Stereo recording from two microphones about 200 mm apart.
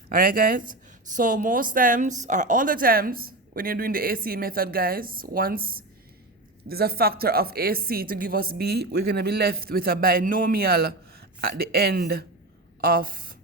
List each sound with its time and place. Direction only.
0.1 s speech: 45° right (ahead or behind)